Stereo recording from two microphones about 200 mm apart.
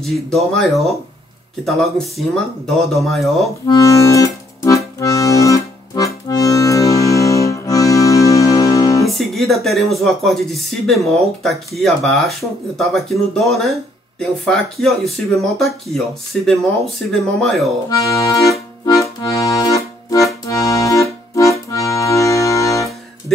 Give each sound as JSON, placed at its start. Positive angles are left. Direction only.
{"t": 0.0, "sound": "speech", "side_deg": 0}
{"t": 3.6, "sound": "accordion", "side_deg": 15}
{"t": 9.0, "sound": "speech", "side_deg": 0}
{"t": 17.8, "sound": "accordion", "side_deg": 15}